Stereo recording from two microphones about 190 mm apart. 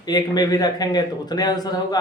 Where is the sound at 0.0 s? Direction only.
20° left (ahead or behind).